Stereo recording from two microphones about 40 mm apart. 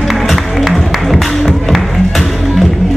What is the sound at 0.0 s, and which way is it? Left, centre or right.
Music, centre.